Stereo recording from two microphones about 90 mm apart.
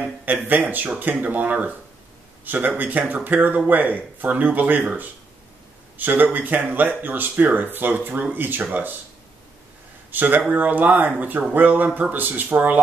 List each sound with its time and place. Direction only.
0.2 s a man's voice: 20° right (ahead or behind)
10.1 s speech: 20° right (ahead or behind)